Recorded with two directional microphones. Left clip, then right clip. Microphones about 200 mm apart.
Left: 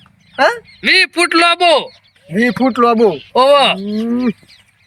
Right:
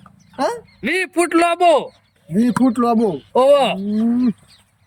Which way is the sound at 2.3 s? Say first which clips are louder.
Left 4 dB; 25° left (ahead or behind).